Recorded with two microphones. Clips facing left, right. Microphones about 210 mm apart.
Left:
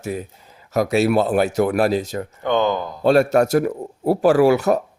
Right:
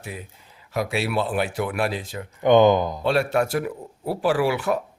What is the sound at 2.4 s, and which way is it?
Speech, 15° right (ahead or behind).